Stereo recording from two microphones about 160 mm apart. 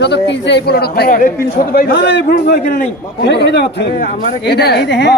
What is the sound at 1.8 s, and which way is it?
A woman's voice, 90° left.